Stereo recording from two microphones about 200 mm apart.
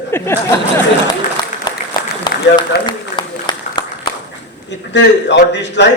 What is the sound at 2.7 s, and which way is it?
Speech, 50° left (ahead or behind).